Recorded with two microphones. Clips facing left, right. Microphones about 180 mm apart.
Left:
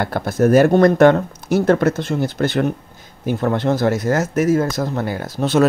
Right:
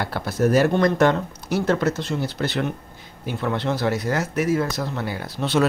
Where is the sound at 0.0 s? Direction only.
50° left (ahead or behind).